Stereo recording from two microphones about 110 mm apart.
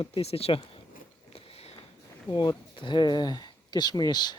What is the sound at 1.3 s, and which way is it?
Biting, 65° left (ahead or behind).